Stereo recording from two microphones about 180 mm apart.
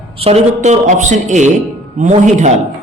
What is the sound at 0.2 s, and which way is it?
Speech, 35° right (ahead or behind).